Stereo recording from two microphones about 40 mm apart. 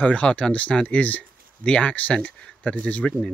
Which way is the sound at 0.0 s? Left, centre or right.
Left.